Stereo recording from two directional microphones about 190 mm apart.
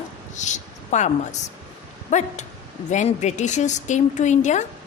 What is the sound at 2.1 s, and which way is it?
A woman's voice, 40° left (ahead or behind).